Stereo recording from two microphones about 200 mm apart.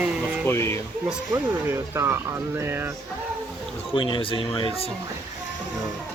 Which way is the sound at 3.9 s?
25° left (ahead or behind).